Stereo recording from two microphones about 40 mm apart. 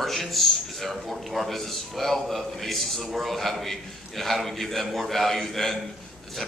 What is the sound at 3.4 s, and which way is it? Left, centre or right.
A man's voice, centre.